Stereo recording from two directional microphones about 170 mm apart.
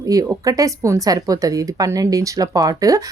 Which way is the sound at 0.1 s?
20° right (ahead or behind).